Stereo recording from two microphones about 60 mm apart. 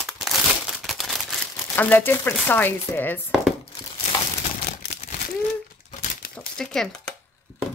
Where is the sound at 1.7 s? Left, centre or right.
Left.